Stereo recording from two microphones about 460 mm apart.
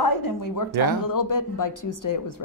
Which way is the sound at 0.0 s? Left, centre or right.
Left.